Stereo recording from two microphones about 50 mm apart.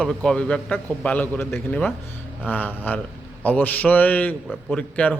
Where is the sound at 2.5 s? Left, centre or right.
Left.